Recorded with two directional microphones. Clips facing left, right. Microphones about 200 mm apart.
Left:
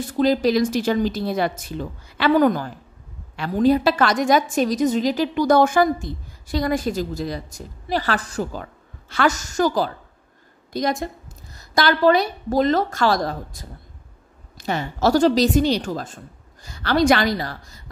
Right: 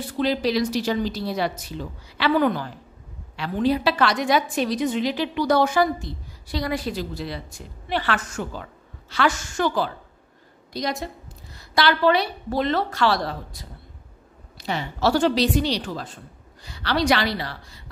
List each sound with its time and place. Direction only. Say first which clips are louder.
0.0 s a woman's voice: left 5 dB; 45° left (ahead or behind)